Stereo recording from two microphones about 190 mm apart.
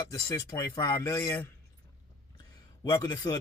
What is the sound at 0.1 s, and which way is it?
A man's voice, 15° left (ahead or behind).